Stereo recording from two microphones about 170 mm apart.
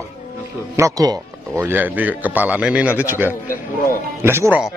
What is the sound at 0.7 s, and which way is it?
Speech, 20° right (ahead or behind).